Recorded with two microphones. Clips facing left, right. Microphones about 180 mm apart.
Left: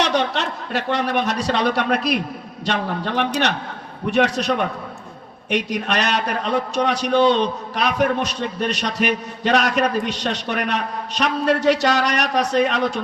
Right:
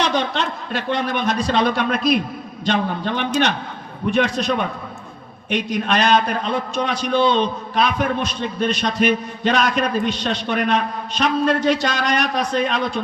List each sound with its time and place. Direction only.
0.0 s a man's voice: 70° left (ahead or behind)